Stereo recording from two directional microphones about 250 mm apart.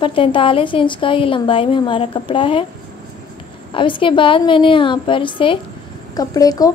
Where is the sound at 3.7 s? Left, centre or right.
Centre.